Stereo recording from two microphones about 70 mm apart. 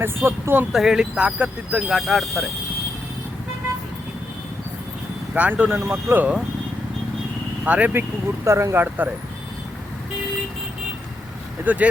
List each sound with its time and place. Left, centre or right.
0.0 s speech: right
0.7 s speech: centre
1.9 s speech: centre
5.3 s speech: right
7.6 s speech: centre
8.4 s speech: right
11.6 s speech: right